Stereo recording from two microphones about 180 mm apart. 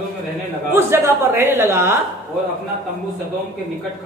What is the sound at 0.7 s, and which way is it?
A man's voice, 15° right (ahead or behind).